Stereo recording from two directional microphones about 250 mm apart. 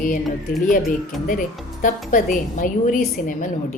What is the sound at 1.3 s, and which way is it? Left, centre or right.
A woman's voice, left.